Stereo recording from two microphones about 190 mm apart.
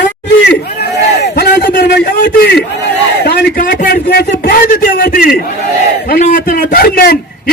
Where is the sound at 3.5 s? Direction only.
45° left (ahead or behind).